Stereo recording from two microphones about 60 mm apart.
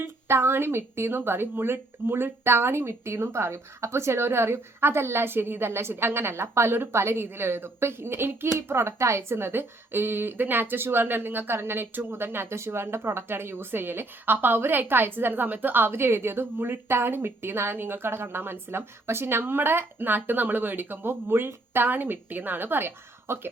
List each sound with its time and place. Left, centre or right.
0.0 s a woman's voice: right
23.3 s a woman's voice: right